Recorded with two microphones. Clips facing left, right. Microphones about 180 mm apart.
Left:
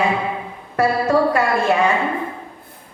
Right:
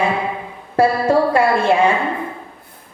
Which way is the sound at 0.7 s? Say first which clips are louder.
Right 2 dB; 30° right (ahead or behind).